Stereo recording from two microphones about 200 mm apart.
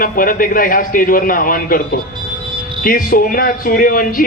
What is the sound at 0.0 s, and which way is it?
A man's voice, 45° left (ahead or behind).